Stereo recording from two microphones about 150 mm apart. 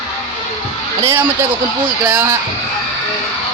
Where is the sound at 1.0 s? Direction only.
20° right (ahead or behind).